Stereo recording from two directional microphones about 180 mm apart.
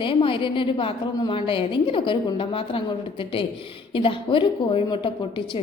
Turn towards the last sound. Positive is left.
turn(degrees=30)  # may be behind; listen again after turning